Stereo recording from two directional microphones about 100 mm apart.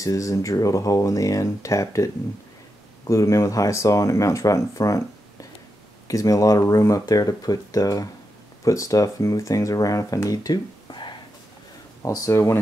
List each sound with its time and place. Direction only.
0.0 s speech: 35° left (ahead or behind)
3.1 s speech: 30° left (ahead or behind); by 11.1 s 50° left (ahead or behind)
12.0 s speech: 30° left (ahead or behind)